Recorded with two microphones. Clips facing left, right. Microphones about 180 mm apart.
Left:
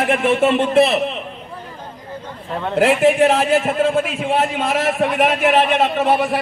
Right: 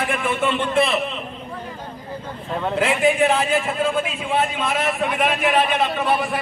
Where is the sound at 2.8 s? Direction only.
85° left.